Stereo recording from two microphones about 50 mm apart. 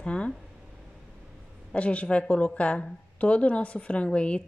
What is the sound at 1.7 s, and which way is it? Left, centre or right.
A woman's voice, left.